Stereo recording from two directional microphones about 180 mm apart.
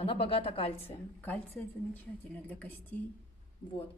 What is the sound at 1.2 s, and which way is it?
A woman's voice, 10° left (ahead or behind).